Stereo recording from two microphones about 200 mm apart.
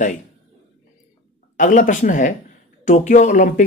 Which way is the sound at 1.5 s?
40° left (ahead or behind).